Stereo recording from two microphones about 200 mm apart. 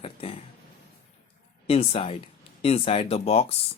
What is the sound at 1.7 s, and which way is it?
Speech, 30° left (ahead or behind).